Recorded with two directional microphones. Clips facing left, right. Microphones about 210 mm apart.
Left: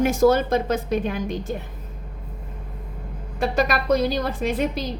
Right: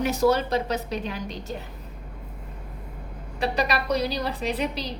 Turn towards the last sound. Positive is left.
turn(degrees=50)  # may be behind; listen again after turning